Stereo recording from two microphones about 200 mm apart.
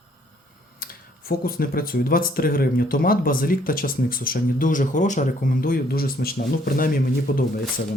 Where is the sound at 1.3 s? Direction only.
50° left (ahead or behind).